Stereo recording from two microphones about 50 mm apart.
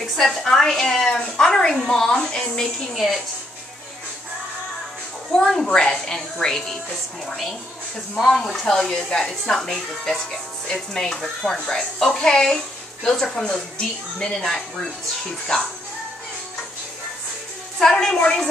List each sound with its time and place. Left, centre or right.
0.0 s a woman's voice: centre
5.5 s a woman's voice: centre
17.7 s a woman's voice: centre